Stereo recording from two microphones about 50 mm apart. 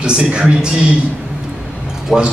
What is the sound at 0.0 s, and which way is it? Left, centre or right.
Speech, centre.